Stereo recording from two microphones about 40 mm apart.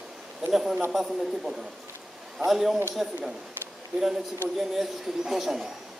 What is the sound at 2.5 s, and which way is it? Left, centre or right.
Speech, centre.